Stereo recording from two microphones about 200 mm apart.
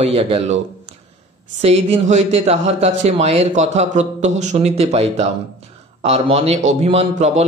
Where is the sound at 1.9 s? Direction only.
35° right (ahead or behind).